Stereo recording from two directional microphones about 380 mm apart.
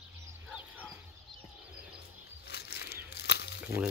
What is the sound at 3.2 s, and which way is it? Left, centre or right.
Crumpling, left.